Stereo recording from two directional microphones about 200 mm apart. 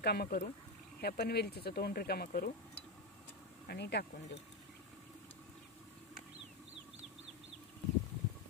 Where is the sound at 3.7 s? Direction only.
55° left (ahead or behind).